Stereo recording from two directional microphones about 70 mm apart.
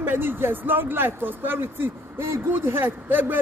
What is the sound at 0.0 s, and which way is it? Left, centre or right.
Speech, right.